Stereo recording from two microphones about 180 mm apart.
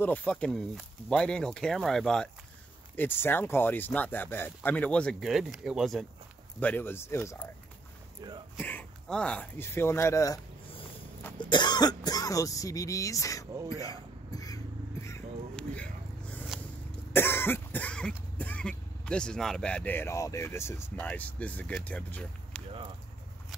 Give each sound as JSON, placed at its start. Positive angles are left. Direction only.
{"t": 0.0, "sound": "speech", "side_deg": 10}
{"t": 6.6, "sound": "speech", "side_deg": 10}
{"t": 8.5, "sound": "speech", "side_deg": 10}
{"t": 13.7, "sound": "a sound", "side_deg": 20}
{"t": 15.5, "sound": "a sound", "side_deg": 5}
{"t": 17.1, "sound": "cough", "side_deg": 10}
{"t": 18.4, "sound": "speech", "side_deg": 5}